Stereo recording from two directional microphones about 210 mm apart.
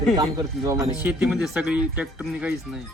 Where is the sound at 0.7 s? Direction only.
5° right (ahead or behind).